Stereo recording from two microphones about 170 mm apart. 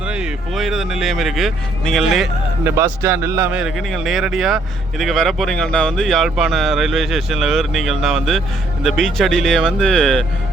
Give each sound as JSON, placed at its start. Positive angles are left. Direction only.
{"t": 0.1, "sound": "speech", "side_deg": -5}
{"t": 2.6, "sound": "a man's voice", "side_deg": -15}
{"t": 3.6, "sound": "speech", "side_deg": 0}